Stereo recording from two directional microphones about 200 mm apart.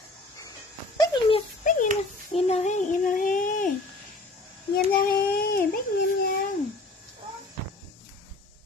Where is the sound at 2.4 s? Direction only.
30° left (ahead or behind).